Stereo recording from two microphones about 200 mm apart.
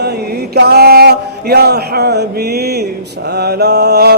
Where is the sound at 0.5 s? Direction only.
55° right (ahead or behind).